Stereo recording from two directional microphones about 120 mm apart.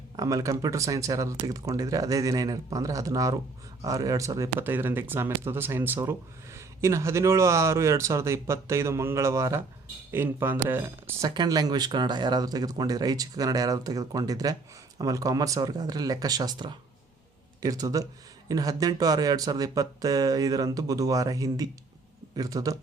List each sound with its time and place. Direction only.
0.2 s speech: 30° right (ahead or behind)
11.3 s speech: 35° right (ahead or behind)